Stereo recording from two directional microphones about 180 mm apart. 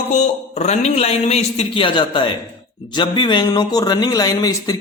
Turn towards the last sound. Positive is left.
turn(degrees=20)  # may be behind; listen again after turning